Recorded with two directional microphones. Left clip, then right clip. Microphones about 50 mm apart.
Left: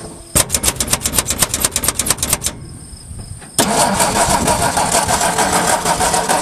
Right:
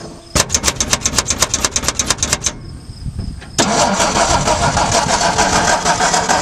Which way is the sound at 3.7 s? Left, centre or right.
Centre.